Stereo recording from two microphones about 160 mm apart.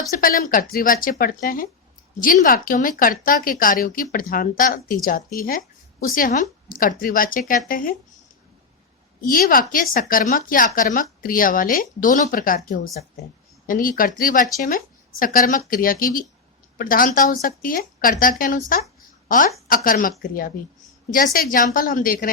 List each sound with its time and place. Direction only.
0.1 s speech: 65° left (ahead or behind)
9.2 s speech: 60° left (ahead or behind)